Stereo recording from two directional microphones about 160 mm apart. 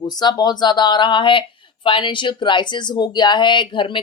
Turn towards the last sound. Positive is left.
turn(degrees=30)  # may be behind; listen again after turning